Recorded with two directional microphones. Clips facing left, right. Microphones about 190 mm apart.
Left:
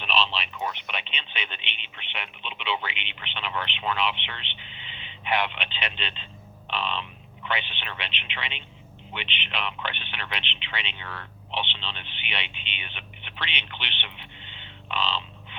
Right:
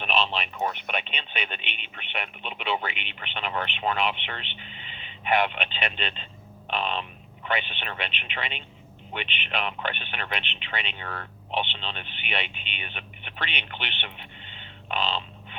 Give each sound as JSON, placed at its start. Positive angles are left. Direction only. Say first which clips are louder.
{"t": 0.0, "sound": "a man's voice", "louder": "right 1 dB", "side_deg": -50}